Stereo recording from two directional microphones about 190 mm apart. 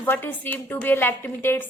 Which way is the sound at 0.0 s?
10° left (ahead or behind).